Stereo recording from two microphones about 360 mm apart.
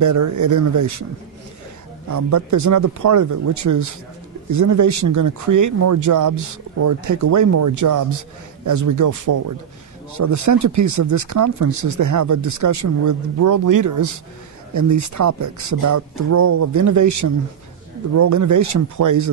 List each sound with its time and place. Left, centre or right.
0.0 s speech: right
2.0 s a man's voice: right